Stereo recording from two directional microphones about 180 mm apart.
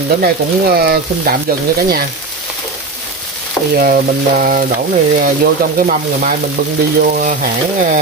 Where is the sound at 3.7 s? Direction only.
50° right (ahead or behind).